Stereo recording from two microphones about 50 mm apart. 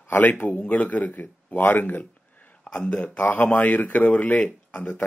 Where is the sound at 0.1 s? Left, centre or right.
Left.